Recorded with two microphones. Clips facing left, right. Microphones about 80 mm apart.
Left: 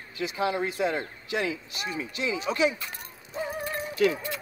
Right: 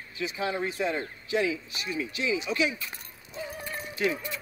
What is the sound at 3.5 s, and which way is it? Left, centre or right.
Music, left.